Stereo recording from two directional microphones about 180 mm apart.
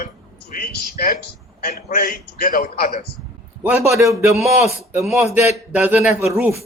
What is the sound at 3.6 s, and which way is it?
Speech, 10° right (ahead or behind).